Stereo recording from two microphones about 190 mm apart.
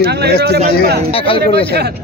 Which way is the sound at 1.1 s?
30° left (ahead or behind).